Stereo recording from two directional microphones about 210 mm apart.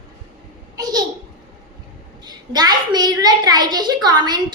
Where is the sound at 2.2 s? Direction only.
20° right (ahead or behind).